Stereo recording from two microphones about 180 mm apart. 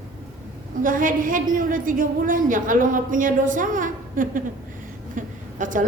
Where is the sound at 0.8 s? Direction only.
50° right (ahead or behind).